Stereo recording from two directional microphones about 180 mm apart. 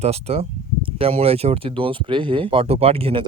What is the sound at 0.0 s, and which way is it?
Speech, 35° right (ahead or behind).